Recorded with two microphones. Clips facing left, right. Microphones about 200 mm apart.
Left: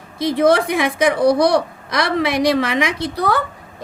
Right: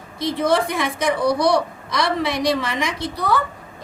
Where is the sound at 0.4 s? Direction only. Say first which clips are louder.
Left 5 dB; 85° left.